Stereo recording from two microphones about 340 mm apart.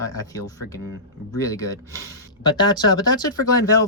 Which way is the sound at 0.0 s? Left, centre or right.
Centre.